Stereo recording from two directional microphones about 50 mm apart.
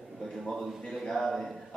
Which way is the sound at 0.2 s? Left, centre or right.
Centre.